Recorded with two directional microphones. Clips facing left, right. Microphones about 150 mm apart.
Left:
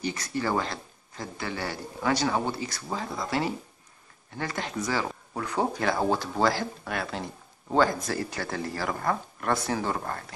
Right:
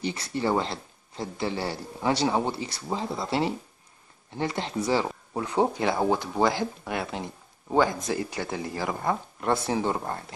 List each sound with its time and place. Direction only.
0.0 s speech: 25° right (ahead or behind)